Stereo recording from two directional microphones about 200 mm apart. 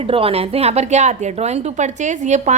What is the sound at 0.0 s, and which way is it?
A woman's voice, 30° right (ahead or behind).